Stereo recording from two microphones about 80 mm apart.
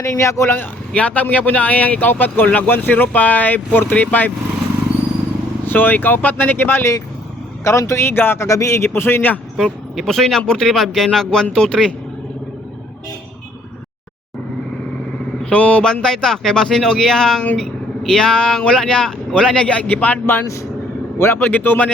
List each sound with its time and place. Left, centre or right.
0.0 s a man's voice: left
0.9 s speech: centre
5.6 s speech: left
7.6 s a man's voice: left
8.4 s a man's voice: left
9.6 s speech: centre
15.4 s speech: centre